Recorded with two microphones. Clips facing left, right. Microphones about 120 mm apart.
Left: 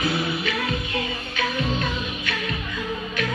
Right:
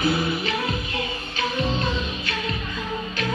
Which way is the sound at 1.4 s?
30° right (ahead or behind).